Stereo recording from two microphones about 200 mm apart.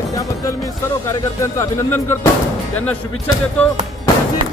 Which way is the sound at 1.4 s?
15° left (ahead or behind).